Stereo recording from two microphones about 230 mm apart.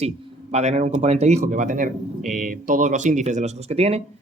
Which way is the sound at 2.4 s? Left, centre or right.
Right.